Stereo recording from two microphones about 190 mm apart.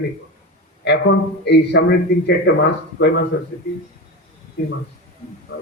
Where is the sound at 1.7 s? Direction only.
60° left (ahead or behind).